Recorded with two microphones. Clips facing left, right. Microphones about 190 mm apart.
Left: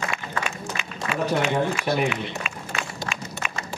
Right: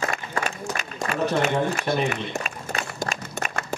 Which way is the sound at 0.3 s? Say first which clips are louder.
Right 2 dB; 40° right (ahead or behind).